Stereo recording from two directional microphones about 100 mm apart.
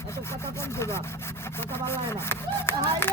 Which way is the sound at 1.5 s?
25° left (ahead or behind).